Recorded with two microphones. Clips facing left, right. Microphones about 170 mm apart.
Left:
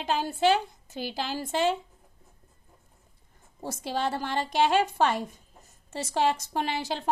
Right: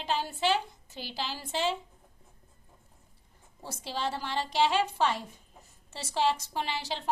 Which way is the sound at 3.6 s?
55° left (ahead or behind).